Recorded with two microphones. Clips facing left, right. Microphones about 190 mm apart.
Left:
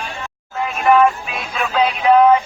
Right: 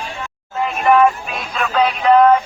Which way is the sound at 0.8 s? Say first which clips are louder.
Even; centre (ahead or behind).